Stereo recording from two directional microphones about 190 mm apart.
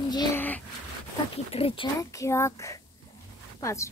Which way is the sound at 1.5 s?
30° left (ahead or behind).